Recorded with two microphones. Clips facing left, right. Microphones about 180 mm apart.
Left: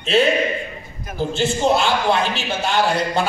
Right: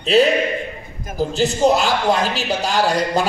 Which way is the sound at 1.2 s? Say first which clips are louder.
Right 3 dB; 40° right (ahead or behind).